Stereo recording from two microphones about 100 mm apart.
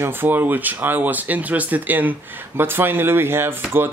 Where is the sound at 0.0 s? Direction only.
20° right (ahead or behind).